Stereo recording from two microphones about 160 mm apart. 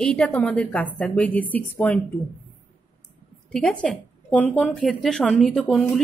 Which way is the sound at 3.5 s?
5° left (ahead or behind).